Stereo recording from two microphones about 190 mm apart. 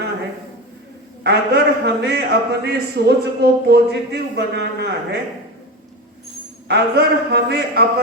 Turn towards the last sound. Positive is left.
turn(degrees=-60)  # may be behind; listen again after turning